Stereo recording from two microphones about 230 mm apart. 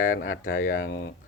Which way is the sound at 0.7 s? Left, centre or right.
Left.